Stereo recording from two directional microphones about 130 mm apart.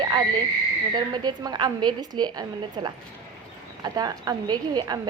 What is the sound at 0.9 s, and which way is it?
A woman's voice, 30° right (ahead or behind).